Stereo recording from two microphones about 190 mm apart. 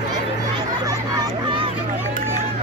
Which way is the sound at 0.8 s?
20° right (ahead or behind).